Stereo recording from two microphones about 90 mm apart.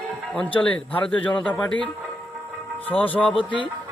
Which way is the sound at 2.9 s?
20° left (ahead or behind).